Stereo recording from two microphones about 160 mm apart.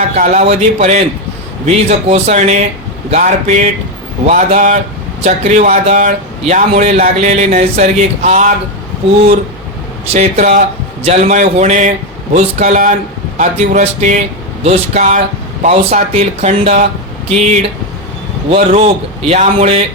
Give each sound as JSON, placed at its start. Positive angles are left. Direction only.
{"t": 0.3, "sound": "a man's voice", "side_deg": -45}
{"t": 10.1, "sound": "a man's voice", "side_deg": -45}